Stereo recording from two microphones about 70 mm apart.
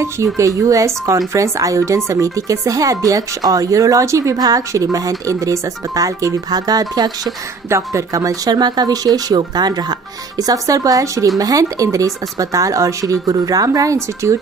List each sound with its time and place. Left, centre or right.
0.0 s speech: right
4.4 s speech: right
7.7 s speech: right